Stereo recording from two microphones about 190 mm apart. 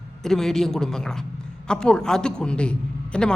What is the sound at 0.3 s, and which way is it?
A man's voice, centre (ahead or behind).